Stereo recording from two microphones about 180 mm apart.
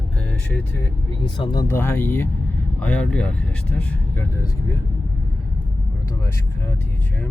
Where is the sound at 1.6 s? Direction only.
15° left (ahead or behind).